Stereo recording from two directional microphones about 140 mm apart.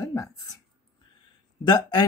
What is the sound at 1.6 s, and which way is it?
Speech, 30° left (ahead or behind).